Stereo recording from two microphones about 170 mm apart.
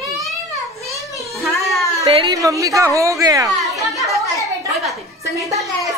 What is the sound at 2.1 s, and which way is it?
A woman's voice, 25° right (ahead or behind).